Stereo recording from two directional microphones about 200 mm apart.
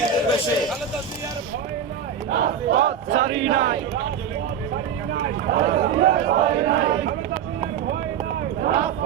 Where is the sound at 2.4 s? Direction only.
70° right (ahead or behind).